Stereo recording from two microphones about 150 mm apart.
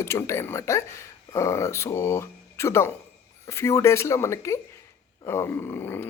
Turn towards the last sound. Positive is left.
turn(degrees=15)  # may be behind; listen again after turning